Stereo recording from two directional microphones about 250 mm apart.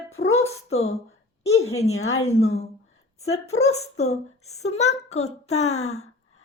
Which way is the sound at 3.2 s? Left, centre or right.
Left.